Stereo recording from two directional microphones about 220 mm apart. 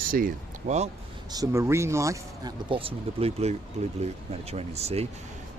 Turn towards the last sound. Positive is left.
turn(degrees=-30)  # may be behind; listen again after turning